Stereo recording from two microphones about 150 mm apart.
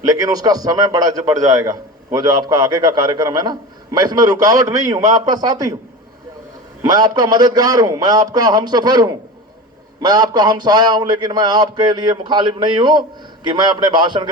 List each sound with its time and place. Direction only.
0.0 s a man's voice: 25° right (ahead or behind)
6.8 s a man's voice: 25° right (ahead or behind)